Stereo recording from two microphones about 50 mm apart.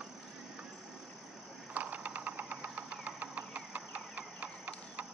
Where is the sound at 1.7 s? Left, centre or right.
Right.